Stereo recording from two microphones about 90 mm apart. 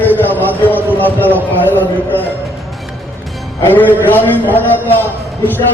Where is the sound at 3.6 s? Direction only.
20° left (ahead or behind).